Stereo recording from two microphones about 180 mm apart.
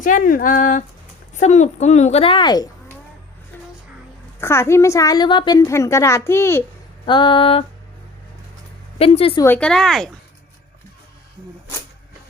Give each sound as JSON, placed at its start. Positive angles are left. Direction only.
{"t": 0.0, "sound": "a woman's voice", "side_deg": 50}
{"t": 4.4, "sound": "a woman's voice", "side_deg": 15}
{"t": 7.0, "sound": "a sound", "side_deg": 25}
{"t": 9.0, "sound": "a woman's voice", "side_deg": 30}
{"t": 9.4, "sound": "speech", "side_deg": 10}